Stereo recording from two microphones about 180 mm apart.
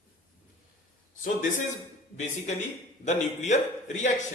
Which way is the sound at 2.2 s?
40° left (ahead or behind).